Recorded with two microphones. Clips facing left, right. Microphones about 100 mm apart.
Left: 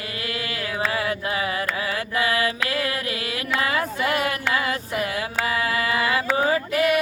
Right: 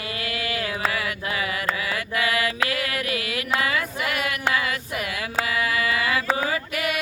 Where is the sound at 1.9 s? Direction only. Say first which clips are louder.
Left 3 dB; 30° left (ahead or behind).